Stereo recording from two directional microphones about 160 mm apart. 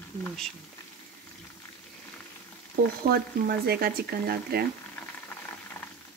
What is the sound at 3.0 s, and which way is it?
Speech, 80° right.